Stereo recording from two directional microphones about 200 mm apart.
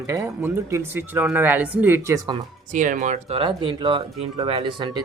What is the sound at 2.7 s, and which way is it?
Speech, 40° right (ahead or behind).